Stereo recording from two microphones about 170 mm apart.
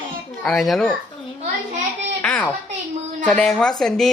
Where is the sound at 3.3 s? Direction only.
5° left (ahead or behind).